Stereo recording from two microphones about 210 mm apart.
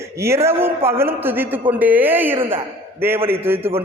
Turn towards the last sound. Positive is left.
turn(degrees=-10)  # may be behind; listen again after turning